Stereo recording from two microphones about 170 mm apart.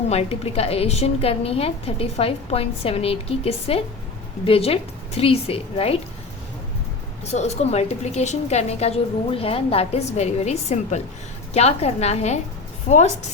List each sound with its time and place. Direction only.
0.1 s a woman's voice: 35° left (ahead or behind)
7.3 s a woman's voice: 40° left (ahead or behind)